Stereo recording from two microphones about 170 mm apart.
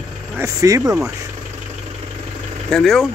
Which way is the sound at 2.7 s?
5° left (ahead or behind).